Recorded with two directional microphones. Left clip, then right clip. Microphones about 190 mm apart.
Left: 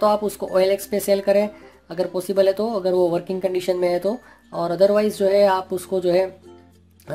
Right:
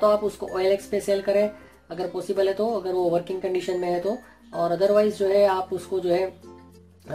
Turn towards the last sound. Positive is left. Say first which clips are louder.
# left 4 dB
turn(degrees=50)  # may be behind; listen again after turning